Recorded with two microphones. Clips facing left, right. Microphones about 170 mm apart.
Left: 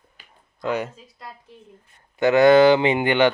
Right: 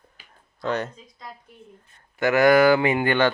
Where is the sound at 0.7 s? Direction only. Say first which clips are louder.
Left 1 dB; 10° left (ahead or behind).